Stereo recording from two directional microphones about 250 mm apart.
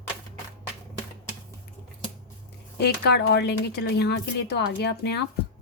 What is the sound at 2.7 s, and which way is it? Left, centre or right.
Speech, left.